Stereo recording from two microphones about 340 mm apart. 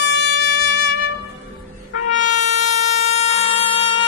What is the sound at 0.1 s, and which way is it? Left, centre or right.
Music, left.